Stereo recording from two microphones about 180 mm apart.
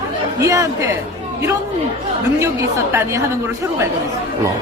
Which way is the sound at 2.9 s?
15° right (ahead or behind).